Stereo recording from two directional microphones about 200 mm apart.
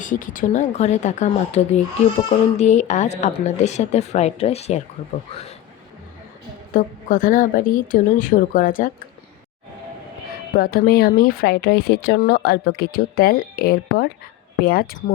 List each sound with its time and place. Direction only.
0.0 s a woman's voice: 40° left (ahead or behind)
6.7 s speech: 45° left (ahead or behind)
10.5 s speech: 50° left (ahead or behind)